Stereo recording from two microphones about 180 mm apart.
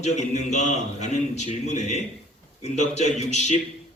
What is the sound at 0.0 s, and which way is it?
A man's voice, 40° left (ahead or behind).